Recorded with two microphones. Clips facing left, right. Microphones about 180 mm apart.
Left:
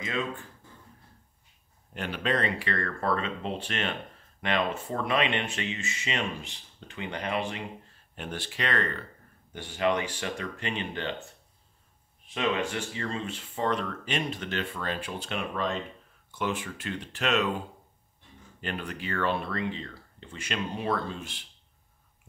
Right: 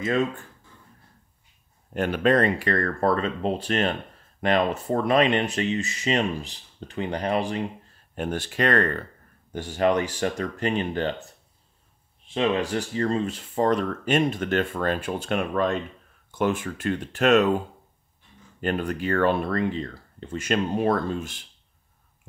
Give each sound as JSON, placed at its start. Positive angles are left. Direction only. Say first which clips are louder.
{"t": 2.0, "sound": "speech", "louder": "right 9 dB", "side_deg": -50}
{"t": 12.4, "sound": "speech", "louder": "right 5 dB", "side_deg": -35}
{"t": 18.6, "sound": "speech", "louder": "right 9 dB", "side_deg": -45}